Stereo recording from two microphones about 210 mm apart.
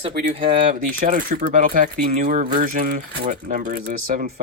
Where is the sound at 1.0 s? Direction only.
40° right (ahead or behind).